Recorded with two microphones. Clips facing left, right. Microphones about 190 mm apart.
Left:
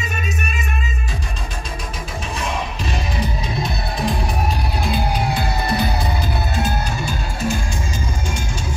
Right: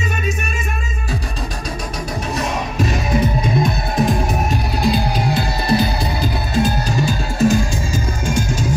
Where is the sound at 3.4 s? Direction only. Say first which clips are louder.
Right 6 dB; 50° right (ahead or behind).